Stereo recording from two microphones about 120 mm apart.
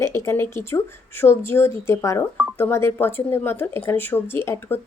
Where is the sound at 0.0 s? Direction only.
20° left (ahead or behind).